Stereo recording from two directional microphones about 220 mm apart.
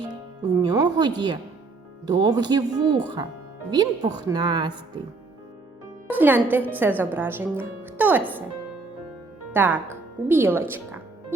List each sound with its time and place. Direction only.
0.1 s speech: 15° right (ahead or behind)
6.1 s speech: 10° right (ahead or behind)
9.5 s speech: 10° right (ahead or behind)